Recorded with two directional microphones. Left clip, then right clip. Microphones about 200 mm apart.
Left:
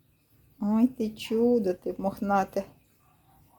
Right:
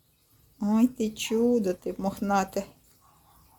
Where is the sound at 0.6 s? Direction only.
Centre (ahead or behind).